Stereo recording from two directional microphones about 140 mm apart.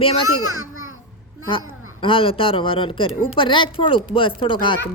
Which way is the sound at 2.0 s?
40° left (ahead or behind).